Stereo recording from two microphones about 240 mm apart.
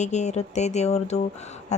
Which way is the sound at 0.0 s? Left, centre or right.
Left.